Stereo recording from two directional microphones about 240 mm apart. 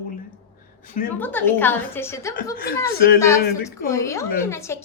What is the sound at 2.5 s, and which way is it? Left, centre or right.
Speech, left.